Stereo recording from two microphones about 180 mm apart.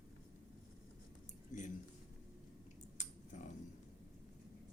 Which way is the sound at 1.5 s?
45° left (ahead or behind).